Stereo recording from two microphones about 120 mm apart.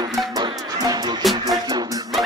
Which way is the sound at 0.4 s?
35° right (ahead or behind).